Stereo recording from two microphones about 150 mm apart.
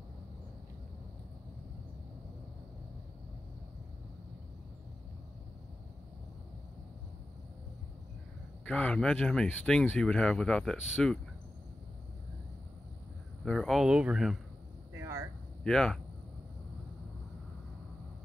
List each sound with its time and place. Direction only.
8.6 s speech: 5° left (ahead or behind)
13.5 s speech: centre (ahead or behind)
15.0 s a sound: 20° right (ahead or behind)
15.6 s speech: 5° left (ahead or behind)